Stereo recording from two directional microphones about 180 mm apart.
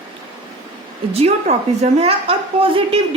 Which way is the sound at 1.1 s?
35° right (ahead or behind).